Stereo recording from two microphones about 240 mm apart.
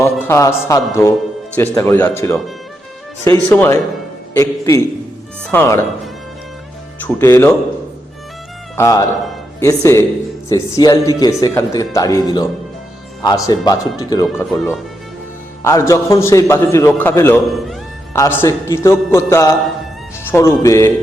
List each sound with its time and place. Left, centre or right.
0.0 s speech: centre
3.5 s speech: centre
7.0 s speech: centre
8.7 s speech: centre